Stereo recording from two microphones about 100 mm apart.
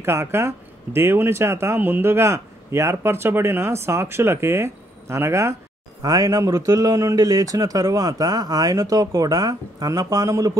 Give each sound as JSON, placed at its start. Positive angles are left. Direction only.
{"t": 0.0, "sound": "a man's voice", "side_deg": -25}